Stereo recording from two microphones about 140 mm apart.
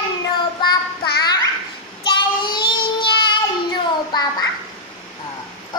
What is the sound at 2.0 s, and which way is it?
Child singing, 35° left (ahead or behind).